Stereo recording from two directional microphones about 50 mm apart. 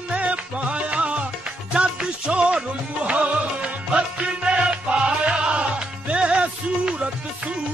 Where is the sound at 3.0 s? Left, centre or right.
Right.